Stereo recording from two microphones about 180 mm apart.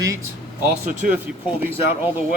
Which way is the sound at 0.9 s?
45° right (ahead or behind).